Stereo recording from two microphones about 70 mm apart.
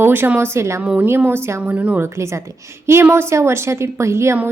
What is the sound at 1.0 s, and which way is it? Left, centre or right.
Speech, right.